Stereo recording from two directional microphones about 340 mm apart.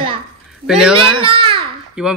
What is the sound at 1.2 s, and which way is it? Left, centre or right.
Speech, centre.